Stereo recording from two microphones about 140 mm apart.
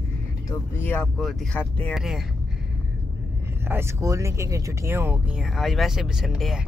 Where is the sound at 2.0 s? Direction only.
Centre (ahead or behind).